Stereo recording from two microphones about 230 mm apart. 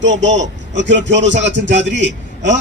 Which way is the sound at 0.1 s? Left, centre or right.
Right.